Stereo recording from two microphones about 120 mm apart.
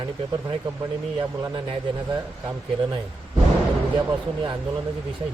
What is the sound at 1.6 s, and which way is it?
Speech, 40° right (ahead or behind).